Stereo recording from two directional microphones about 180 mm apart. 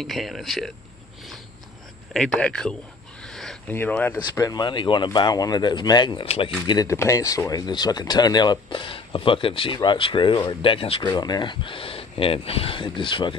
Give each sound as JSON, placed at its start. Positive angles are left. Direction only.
{"t": 0.0, "sound": "speech", "side_deg": 0}
{"t": 2.1, "sound": "speech", "side_deg": 5}
{"t": 3.3, "sound": "a sound", "side_deg": 0}
{"t": 4.4, "sound": "speech", "side_deg": 20}
{"t": 6.7, "sound": "speech", "side_deg": 20}